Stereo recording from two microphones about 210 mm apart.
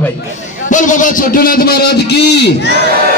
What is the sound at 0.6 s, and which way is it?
A man's voice, 35° left (ahead or behind).